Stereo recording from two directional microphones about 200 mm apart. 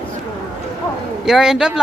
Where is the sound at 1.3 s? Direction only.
Centre (ahead or behind).